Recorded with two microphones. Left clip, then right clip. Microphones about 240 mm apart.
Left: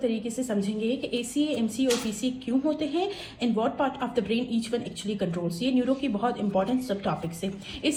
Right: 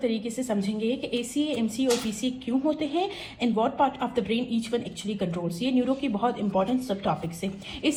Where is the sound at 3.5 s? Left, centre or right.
Right.